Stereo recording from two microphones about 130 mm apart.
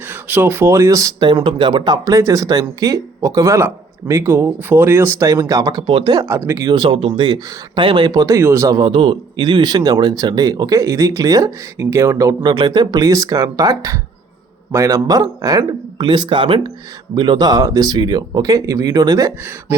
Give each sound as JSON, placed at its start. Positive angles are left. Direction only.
{"t": 0.1, "sound": "speech", "side_deg": -15}
{"t": 6.2, "sound": "speech", "side_deg": -20}
{"t": 6.7, "sound": "speech", "side_deg": -35}
{"t": 8.8, "sound": "speech", "side_deg": -40}